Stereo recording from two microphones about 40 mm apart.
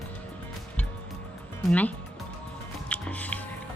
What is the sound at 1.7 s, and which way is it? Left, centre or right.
Music, left.